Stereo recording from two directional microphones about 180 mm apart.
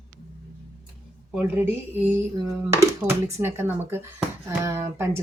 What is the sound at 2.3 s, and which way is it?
Speech, 20° right (ahead or behind).